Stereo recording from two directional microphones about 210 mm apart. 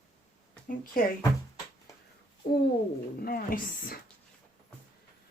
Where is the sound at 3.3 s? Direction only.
45° left (ahead or behind).